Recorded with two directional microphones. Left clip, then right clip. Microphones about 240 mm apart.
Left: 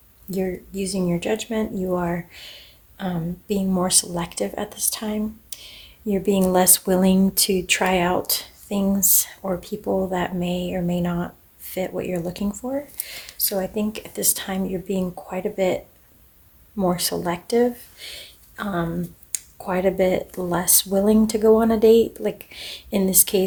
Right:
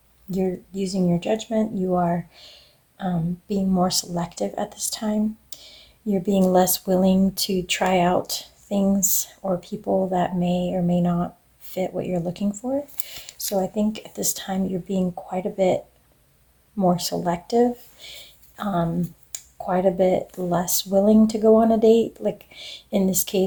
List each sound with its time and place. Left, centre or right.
0.3 s speech: centre